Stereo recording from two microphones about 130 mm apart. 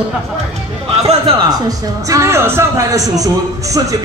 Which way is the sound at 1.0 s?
50° right (ahead or behind).